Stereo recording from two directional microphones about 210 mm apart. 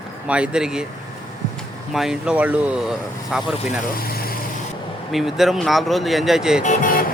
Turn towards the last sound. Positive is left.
turn(degrees=35)  # may be behind; listen again after turning